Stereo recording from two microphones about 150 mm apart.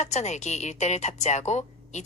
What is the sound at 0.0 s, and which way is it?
A woman's voice, 50° left (ahead or behind).